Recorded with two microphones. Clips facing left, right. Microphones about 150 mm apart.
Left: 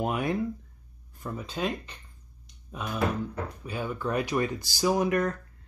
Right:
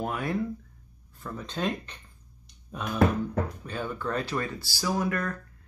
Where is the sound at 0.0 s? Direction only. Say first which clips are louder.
Left 2 dB; 20° left (ahead or behind).